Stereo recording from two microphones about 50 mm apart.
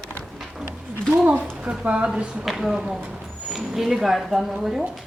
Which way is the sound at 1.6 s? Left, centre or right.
Right.